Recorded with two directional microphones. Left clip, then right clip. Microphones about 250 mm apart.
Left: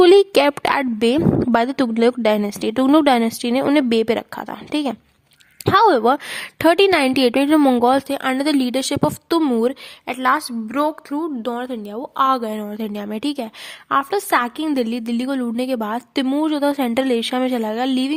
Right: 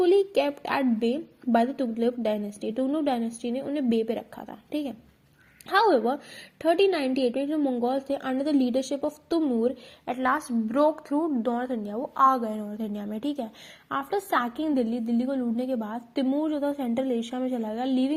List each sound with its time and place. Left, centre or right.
0.0 s a woman's voice: left